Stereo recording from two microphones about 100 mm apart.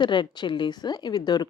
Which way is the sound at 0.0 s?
50° left (ahead or behind).